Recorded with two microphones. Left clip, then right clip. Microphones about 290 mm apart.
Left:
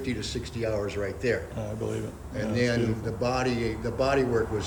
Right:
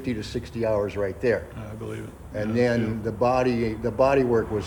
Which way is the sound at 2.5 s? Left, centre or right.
Centre.